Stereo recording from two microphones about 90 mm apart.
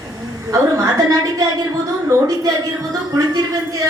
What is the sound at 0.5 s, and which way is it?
Speech, 45° right (ahead or behind).